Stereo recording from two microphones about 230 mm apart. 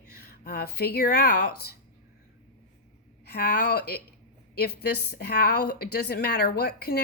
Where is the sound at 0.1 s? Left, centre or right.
Left.